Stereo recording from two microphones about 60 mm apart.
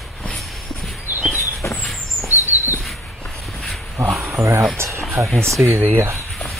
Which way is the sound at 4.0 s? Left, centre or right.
Right.